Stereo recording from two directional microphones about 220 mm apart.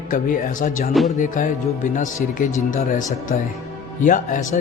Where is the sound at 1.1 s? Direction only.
35° left (ahead or behind).